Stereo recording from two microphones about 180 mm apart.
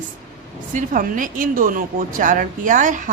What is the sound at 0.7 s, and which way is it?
A woman's voice, 45° right (ahead or behind).